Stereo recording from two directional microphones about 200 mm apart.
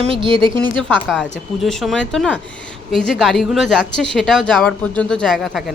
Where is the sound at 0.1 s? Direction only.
25° right (ahead or behind).